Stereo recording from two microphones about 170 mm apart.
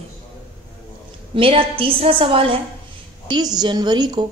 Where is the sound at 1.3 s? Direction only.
30° right (ahead or behind).